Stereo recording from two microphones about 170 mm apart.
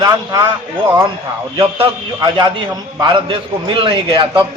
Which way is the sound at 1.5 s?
25° right (ahead or behind).